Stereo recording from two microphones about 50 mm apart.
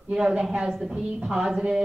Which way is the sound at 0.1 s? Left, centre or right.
Centre.